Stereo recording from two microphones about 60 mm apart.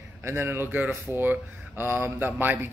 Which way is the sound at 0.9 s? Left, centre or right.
Right.